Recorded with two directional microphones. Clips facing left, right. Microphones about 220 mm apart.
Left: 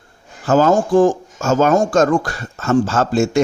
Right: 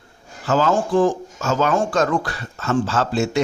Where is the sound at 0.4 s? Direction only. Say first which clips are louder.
Left 5 dB; 45° left (ahead or behind).